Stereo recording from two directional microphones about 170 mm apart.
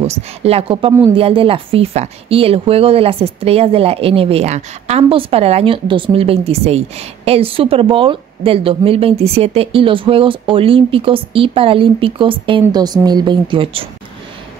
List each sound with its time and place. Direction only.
0.0 s speech: 35° right (ahead or behind)